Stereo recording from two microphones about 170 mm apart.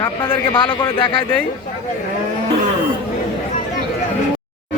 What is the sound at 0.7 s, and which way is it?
Speech, 25° left (ahead or behind).